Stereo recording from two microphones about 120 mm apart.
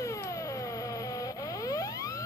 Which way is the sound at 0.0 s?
25° left (ahead or behind).